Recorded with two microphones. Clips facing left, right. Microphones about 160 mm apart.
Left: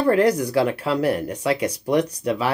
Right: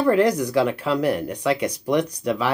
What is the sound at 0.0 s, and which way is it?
Speech, 10° left (ahead or behind).